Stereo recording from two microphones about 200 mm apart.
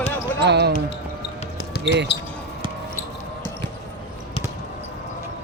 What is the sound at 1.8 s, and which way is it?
Speech, 60° right (ahead or behind).